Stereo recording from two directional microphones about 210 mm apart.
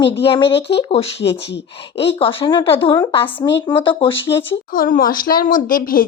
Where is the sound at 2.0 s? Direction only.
25° left (ahead or behind).